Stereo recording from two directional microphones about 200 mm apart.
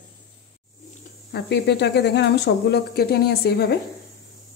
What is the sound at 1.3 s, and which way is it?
Speech, 55° left (ahead or behind).